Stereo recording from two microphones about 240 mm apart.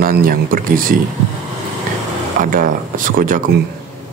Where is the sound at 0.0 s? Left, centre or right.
Right.